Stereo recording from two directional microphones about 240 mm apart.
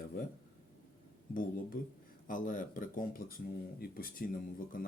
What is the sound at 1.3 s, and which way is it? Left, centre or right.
A man's voice, left.